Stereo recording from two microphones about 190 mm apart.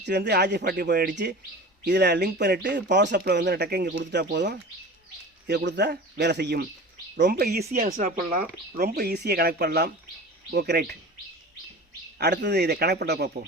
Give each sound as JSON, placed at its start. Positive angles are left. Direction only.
{"t": 0.0, "sound": "speech", "side_deg": -60}
{"t": 12.2, "sound": "speech", "side_deg": -60}